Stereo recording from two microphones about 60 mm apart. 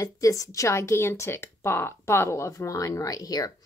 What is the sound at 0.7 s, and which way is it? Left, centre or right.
Speech, left.